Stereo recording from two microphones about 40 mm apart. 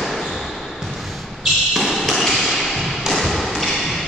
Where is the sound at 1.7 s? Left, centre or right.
Centre.